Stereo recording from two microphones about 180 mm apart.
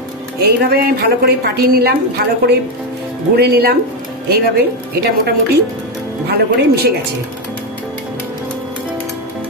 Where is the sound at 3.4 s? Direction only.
60° right (ahead or behind).